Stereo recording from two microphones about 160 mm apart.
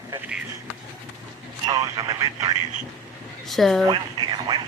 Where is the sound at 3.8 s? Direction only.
30° right (ahead or behind).